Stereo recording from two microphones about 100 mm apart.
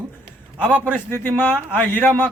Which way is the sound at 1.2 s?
20° left (ahead or behind).